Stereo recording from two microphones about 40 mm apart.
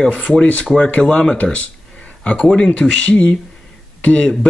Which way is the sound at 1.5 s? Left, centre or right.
Left.